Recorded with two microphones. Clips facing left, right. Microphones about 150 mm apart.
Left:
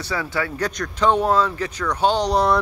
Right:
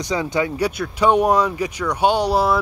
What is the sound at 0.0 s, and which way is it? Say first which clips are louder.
Speech: right 4 dB; 20° right (ahead or behind).